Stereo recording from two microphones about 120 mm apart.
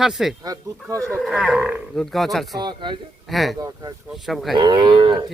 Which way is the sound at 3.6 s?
30° right (ahead or behind).